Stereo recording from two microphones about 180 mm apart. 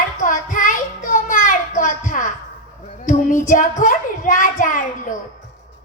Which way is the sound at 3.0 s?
45° left (ahead or behind).